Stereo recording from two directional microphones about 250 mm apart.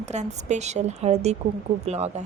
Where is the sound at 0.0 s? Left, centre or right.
Right.